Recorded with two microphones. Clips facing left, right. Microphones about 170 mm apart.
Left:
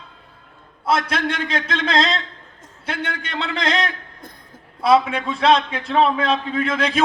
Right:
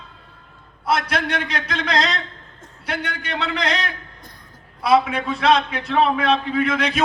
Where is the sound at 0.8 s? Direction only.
30° left (ahead or behind).